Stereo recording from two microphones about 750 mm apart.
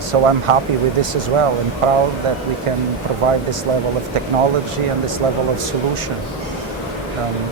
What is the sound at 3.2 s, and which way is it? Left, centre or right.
Speech, right.